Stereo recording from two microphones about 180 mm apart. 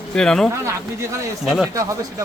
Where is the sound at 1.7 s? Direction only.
20° right (ahead or behind).